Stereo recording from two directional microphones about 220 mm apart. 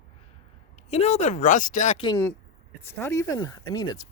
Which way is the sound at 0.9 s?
30° left (ahead or behind).